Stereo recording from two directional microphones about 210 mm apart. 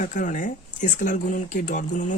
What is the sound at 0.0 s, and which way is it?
Speech, 35° left (ahead or behind).